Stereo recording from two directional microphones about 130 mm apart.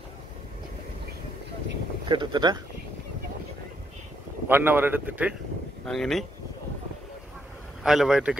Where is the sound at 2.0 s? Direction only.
35° right (ahead or behind).